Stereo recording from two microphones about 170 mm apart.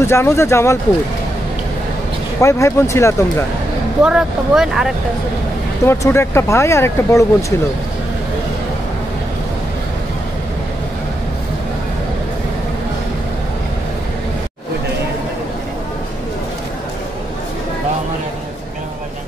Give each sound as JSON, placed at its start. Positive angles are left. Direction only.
{"t": 0.0, "sound": "speech", "side_deg": 15}
{"t": 2.4, "sound": "speech", "side_deg": 15}
{"t": 4.0, "sound": "speech", "side_deg": -5}
{"t": 5.9, "sound": "speech", "side_deg": 15}